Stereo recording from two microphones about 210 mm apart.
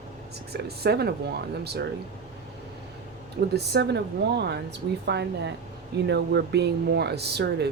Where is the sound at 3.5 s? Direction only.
55° right (ahead or behind).